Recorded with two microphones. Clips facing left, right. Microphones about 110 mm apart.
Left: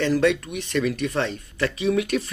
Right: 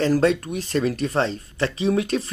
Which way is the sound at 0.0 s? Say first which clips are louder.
Right 1 dB; 35° right (ahead or behind).